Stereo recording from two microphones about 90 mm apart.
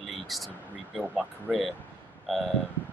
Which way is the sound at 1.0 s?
15° right (ahead or behind).